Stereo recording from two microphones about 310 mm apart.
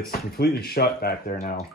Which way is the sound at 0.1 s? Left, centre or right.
Left.